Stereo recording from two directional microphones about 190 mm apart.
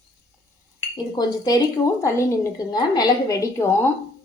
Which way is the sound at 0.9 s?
20° left (ahead or behind).